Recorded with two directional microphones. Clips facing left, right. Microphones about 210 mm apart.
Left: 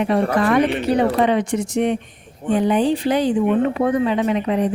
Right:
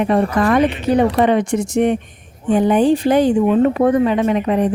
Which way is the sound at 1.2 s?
50° right (ahead or behind).